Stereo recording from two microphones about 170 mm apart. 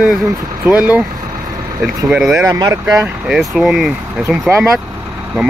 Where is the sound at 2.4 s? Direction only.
20° right (ahead or behind).